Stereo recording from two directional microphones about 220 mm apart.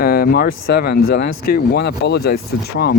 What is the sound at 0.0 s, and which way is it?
Speech, 40° left (ahead or behind).